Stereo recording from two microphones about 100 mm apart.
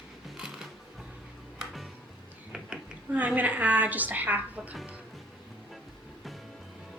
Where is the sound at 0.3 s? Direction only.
5° right (ahead or behind).